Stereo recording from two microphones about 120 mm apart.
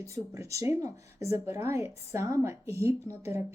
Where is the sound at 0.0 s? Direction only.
25° right (ahead or behind).